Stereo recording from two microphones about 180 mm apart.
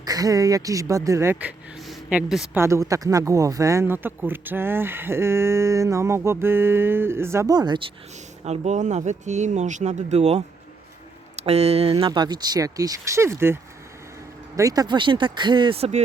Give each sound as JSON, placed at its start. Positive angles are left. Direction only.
{"t": 0.0, "sound": "speech", "side_deg": -20}
{"t": 2.6, "sound": "speech", "side_deg": -15}
{"t": 8.4, "sound": "speech", "side_deg": -40}
{"t": 11.4, "sound": "speech", "side_deg": -35}